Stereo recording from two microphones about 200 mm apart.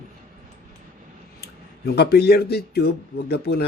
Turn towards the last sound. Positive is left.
turn(degrees=50)  # may be behind; listen again after turning